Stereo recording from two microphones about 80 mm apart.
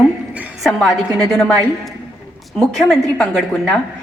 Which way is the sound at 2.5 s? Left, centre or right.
Centre.